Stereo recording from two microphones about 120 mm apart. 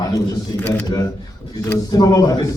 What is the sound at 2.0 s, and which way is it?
Speech, 35° left (ahead or behind).